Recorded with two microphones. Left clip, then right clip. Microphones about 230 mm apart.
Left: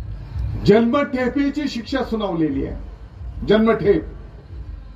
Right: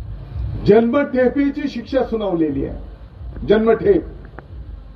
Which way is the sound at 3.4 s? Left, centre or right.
Left.